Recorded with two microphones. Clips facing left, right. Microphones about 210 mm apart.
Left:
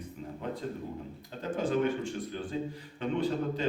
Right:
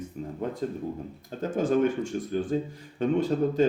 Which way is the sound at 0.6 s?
45° right (ahead or behind).